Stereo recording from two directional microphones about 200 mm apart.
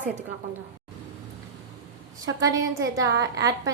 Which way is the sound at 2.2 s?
15° right (ahead or behind).